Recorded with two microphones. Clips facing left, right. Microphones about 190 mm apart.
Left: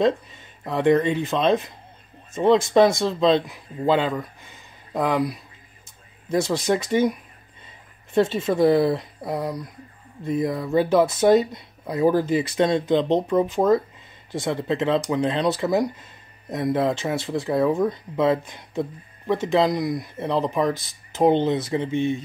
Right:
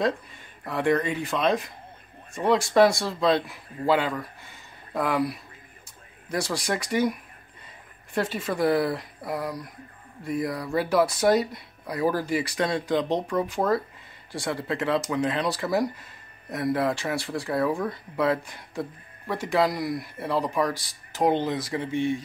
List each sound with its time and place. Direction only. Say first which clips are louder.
0.7 s speech: left 5 dB; 20° left (ahead or behind)